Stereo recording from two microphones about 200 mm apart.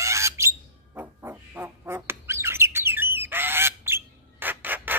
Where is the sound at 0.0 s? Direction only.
15° right (ahead or behind).